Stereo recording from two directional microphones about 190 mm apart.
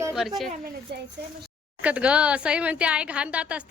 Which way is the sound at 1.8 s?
5° right (ahead or behind).